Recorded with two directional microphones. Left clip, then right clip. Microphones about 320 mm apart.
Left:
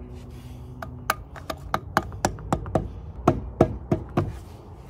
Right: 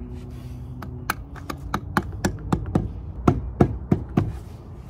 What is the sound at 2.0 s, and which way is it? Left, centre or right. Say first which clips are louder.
Computer keyboard: left 2 dB; centre.